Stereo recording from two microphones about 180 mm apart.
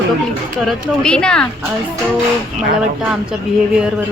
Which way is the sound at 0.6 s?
Centre (ahead or behind).